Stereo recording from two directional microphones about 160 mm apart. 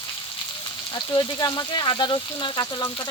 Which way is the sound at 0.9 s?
25° left (ahead or behind).